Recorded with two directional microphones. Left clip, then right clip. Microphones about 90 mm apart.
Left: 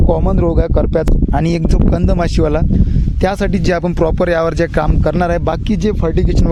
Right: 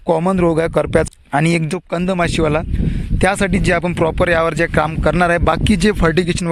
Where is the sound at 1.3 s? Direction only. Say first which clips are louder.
Right 1 dB; 40° left (ahead or behind).